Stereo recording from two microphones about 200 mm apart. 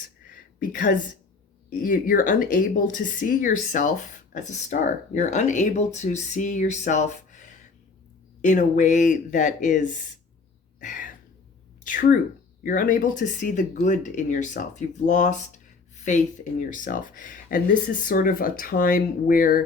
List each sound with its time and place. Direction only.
0.6 s speech: 45° left (ahead or behind)
10.8 s a sound: 40° left (ahead or behind)
11.8 s speech: 45° left (ahead or behind)